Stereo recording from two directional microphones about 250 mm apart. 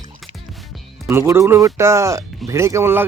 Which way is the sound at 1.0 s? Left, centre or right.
Centre.